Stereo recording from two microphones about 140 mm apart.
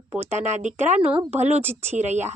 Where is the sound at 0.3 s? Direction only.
55° right (ahead or behind).